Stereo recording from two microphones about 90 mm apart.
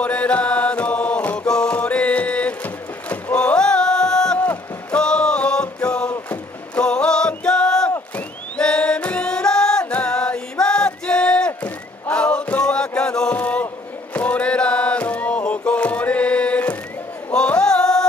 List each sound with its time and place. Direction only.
0.0 s mantra: 15° left (ahead or behind)
1.2 s music: 15° left (ahead or behind)
4.9 s a sound: 10° left (ahead or behind)
6.7 s music: 10° left (ahead or behind)
13.4 s a sound: 15° left (ahead or behind)
14.1 s music: 15° left (ahead or behind)